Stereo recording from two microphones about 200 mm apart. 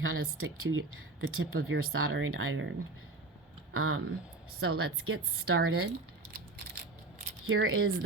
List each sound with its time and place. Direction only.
0.0 s speech: 85° right
3.8 s speech: 90° right
7.4 s speech: 85° right